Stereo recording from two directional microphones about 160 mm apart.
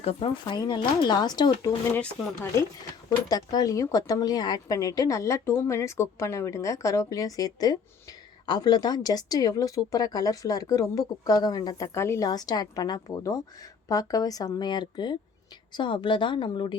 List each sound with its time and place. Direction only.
0.0 s speech: 35° left (ahead or behind)
2.0 s a woman's voice: 15° left (ahead or behind); by 16.7 s 30° left (ahead or behind)